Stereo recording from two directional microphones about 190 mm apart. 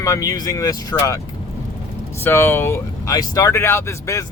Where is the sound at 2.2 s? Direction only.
10° left (ahead or behind).